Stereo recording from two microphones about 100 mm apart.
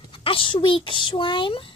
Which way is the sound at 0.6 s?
55° left (ahead or behind).